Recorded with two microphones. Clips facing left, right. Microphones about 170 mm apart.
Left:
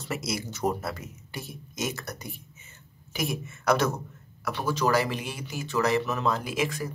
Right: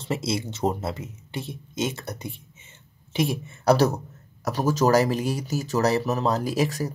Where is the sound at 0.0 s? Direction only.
25° right (ahead or behind).